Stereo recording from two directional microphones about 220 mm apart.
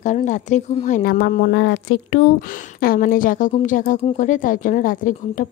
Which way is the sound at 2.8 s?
40° left (ahead or behind).